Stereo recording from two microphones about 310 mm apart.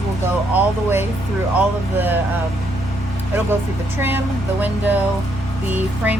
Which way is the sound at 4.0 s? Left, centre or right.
Centre.